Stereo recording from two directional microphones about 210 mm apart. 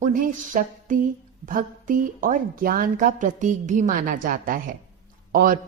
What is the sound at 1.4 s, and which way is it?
Speech, 40° right (ahead or behind).